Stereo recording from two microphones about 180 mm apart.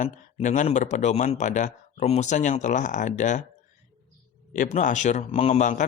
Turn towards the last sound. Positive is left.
turn(degrees=40)  # may be behind; listen again after turning